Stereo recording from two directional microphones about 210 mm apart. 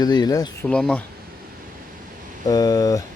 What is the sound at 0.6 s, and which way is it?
Speech, 5° left (ahead or behind).